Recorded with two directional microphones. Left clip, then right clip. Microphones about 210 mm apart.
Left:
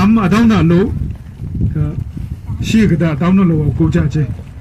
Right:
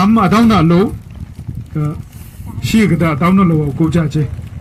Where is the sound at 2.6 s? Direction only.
20° right (ahead or behind).